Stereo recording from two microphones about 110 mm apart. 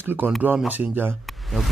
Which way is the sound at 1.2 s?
Centre (ahead or behind).